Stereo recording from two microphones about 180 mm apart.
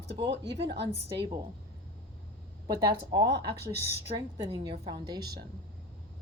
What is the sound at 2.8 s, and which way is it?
A woman's voice, 25° right (ahead or behind).